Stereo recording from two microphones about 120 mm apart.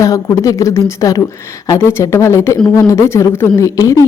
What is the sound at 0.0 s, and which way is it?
Speech, 25° left (ahead or behind).